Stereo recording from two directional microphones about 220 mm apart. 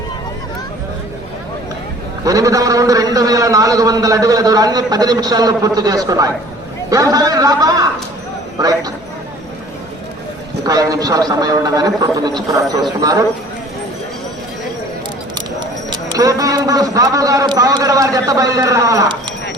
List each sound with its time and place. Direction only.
2.2 s a man's voice: 15° right (ahead or behind)
10.7 s a man's voice: 15° right (ahead or behind)
15.9 s a man's voice: 15° right (ahead or behind)